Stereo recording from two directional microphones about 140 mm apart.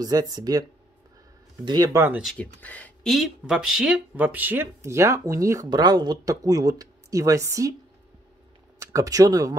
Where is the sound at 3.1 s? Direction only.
Centre (ahead or behind); by 7.7 s 25° right (ahead or behind).